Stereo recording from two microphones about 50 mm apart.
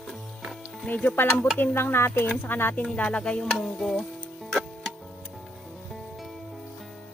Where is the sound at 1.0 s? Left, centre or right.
Left.